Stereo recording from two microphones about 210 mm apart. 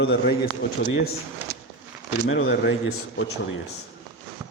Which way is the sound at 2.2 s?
60° left (ahead or behind).